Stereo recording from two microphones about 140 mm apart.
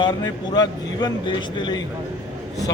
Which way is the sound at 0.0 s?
30° left (ahead or behind).